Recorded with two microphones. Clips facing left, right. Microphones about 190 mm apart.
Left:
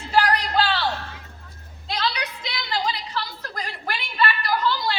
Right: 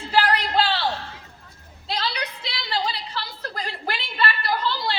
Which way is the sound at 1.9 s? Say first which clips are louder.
Left 1 dB; 30° right (ahead or behind).